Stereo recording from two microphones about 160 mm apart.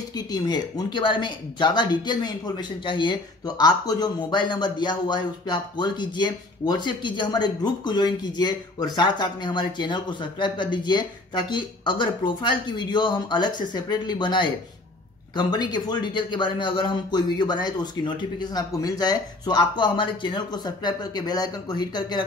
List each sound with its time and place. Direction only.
0.1 s speech: 25° left (ahead or behind)